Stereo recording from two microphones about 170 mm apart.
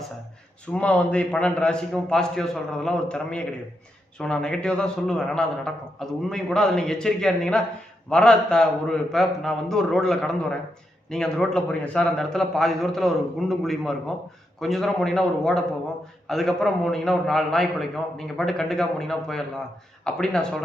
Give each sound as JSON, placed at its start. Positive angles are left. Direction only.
{"t": 0.7, "sound": "a man's voice", "side_deg": 5}